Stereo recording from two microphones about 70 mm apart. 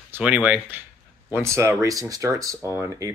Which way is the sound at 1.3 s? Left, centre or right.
Right.